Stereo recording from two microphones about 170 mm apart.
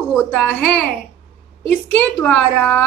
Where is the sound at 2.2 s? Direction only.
5° left (ahead or behind).